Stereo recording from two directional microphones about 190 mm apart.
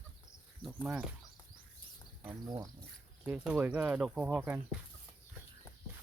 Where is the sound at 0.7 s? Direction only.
10° right (ahead or behind).